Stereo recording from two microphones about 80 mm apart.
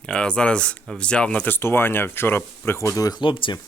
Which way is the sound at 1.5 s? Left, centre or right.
Left.